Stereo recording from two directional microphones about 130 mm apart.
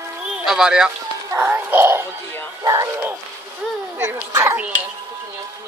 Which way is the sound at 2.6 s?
25° right (ahead or behind).